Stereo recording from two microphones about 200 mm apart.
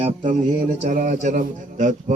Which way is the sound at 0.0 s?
35° right (ahead or behind).